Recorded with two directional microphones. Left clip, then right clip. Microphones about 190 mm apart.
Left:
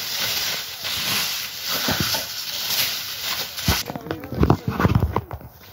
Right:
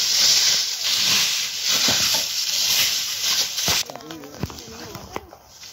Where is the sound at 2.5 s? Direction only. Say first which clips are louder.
Right 3 dB; 25° right (ahead or behind).